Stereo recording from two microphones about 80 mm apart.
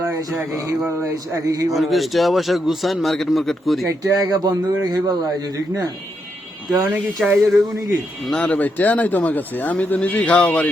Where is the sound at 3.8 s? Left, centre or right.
Right.